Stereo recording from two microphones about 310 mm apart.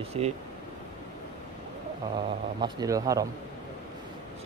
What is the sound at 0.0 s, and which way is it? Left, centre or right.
Speech, centre.